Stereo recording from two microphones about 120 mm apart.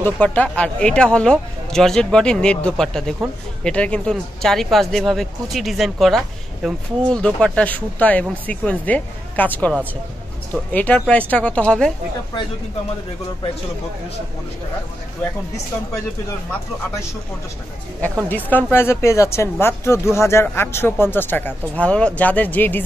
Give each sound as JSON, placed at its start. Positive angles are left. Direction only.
{"t": 0.0, "sound": "speech", "side_deg": 15}
{"t": 18.3, "sound": "speech", "side_deg": 15}